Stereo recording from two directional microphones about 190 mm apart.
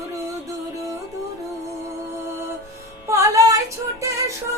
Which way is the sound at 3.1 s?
15° right (ahead or behind).